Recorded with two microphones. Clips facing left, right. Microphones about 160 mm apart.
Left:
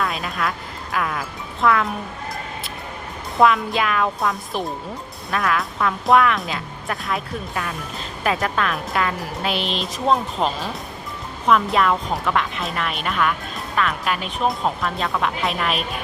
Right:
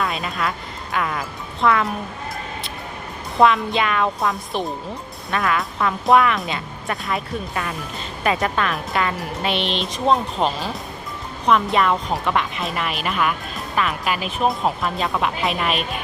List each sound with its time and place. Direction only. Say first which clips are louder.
0.0 s music: even; centre (ahead or behind)
0.9 s speech: right 1 dB; centre (ahead or behind)
3.3 s speech: right 1 dB; centre (ahead or behind)